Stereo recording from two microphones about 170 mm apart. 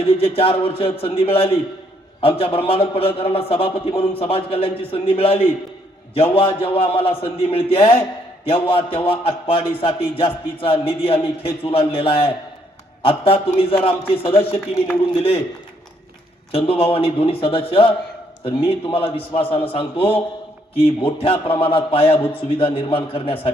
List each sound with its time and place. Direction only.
0.0 s a man's voice: 35° left (ahead or behind)
16.5 s a man's voice: 35° left (ahead or behind)